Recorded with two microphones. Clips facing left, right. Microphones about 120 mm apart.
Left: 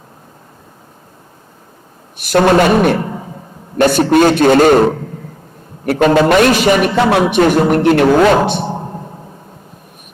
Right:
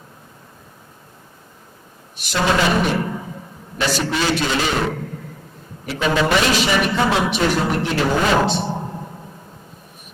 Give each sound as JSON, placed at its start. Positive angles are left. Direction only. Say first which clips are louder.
{"t": 2.1, "sound": "a man's voice", "louder": "left 9 dB", "side_deg": 55}
{"t": 6.9, "sound": "speech", "louder": "left 8 dB", "side_deg": 65}